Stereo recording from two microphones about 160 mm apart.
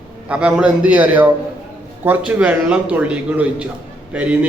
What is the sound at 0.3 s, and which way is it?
A man's voice, 5° right (ahead or behind).